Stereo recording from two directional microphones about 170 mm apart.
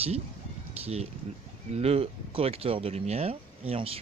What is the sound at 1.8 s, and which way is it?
Speech, 35° right (ahead or behind).